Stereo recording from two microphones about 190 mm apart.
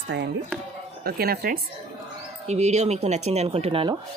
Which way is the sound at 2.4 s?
35° right (ahead or behind).